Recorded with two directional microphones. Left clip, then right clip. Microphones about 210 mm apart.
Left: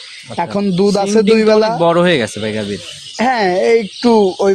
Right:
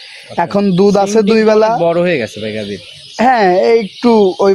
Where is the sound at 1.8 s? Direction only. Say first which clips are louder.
Left 1 dB; 20° left (ahead or behind).